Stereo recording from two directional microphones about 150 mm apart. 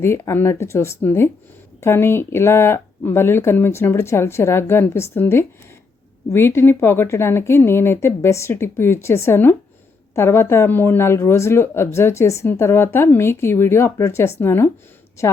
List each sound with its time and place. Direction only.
0.0 s speech: 15° left (ahead or behind)